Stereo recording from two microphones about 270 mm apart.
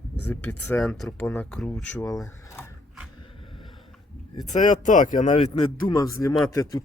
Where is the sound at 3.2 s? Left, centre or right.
Centre.